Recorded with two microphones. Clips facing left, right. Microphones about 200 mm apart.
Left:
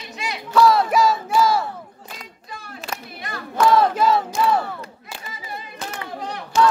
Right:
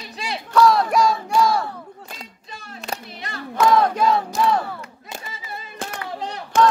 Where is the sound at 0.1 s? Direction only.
35° right (ahead or behind).